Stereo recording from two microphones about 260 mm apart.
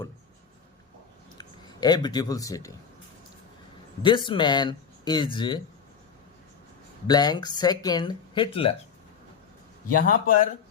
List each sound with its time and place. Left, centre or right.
1.4 s speech: centre
4.0 s speech: centre
7.1 s speech: centre
9.9 s speech: left